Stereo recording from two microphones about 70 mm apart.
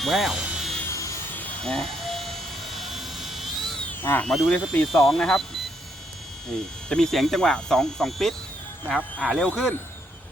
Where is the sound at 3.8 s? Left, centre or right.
Left.